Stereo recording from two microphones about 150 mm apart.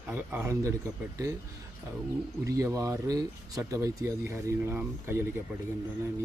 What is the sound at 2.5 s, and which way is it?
Speech, 20° right (ahead or behind).